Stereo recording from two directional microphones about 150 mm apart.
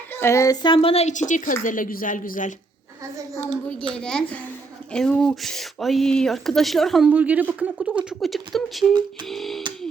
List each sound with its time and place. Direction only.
0.1 s a woman's voice: 15° left (ahead or behind); by 2.5 s 60° left (ahead or behind)
3.9 s speech: 5° left (ahead or behind)
7.1 s speech: 10° right (ahead or behind)